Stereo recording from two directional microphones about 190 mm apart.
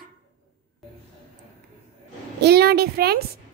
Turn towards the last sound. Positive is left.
turn(degrees=-55)  # may be behind; listen again after turning